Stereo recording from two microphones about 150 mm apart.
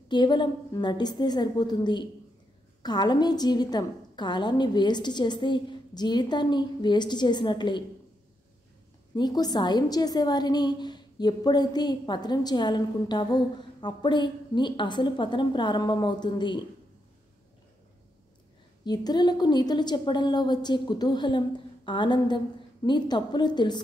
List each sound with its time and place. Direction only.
0.1 s a woman's voice: 30° left (ahead or behind)
9.1 s a woman's voice: 25° left (ahead or behind)
18.9 s a woman's voice: 30° left (ahead or behind)